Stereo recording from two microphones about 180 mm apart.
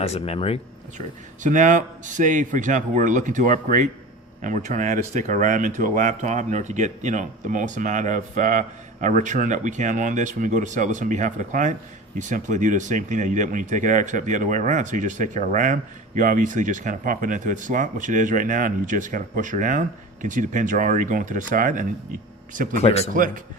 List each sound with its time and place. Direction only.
0.0 s speech: 35° left (ahead or behind)
0.9 s speech: 45° right (ahead or behind)
22.8 s speech: 35° left (ahead or behind)
23.1 s speech: 45° right (ahead or behind)